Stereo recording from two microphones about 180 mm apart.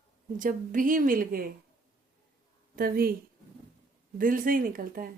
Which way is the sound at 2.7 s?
55° right (ahead or behind).